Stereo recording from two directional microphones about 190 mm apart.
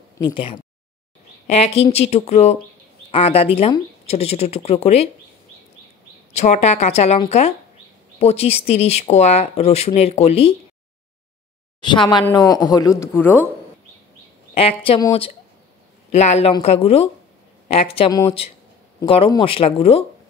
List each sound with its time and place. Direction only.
0.2 s speech: 25° left (ahead or behind)
6.3 s speech: 35° left (ahead or behind)
11.8 s a man's voice: 25° left (ahead or behind)
14.5 s speech: 30° left (ahead or behind)
16.1 s speech: 35° left (ahead or behind)